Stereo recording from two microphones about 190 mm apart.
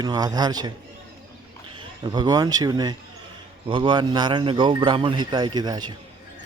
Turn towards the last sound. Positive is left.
turn(degrees=-20)  # may be behind; listen again after turning